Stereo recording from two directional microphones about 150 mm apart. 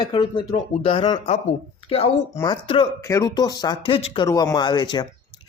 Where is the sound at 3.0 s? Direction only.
20° left (ahead or behind).